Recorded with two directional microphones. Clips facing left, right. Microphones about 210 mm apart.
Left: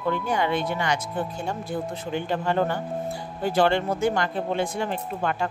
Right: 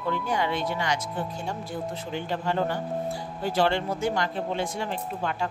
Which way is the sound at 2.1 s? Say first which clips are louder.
Left 4 dB; 55° left (ahead or behind).